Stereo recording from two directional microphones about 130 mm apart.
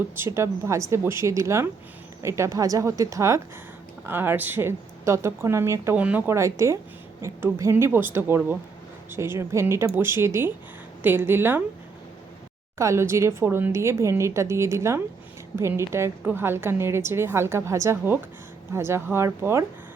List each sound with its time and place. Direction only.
0.2 s a woman's voice: 20° right (ahead or behind)
12.8 s a woman's voice: 20° right (ahead or behind)